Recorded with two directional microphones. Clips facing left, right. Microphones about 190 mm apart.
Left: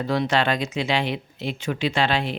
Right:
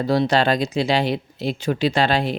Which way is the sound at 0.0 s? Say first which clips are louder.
Right 4 dB; 35° right (ahead or behind).